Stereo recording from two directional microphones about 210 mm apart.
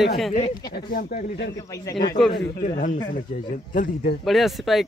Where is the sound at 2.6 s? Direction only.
35° left (ahead or behind).